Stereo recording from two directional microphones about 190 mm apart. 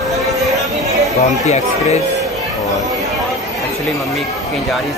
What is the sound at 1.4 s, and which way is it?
Speech, 35° left (ahead or behind).